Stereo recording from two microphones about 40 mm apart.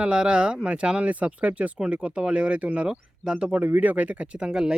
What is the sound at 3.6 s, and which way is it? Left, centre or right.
Speech, right.